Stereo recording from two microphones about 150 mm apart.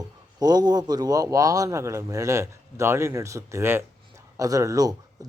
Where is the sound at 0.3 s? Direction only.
25° right (ahead or behind).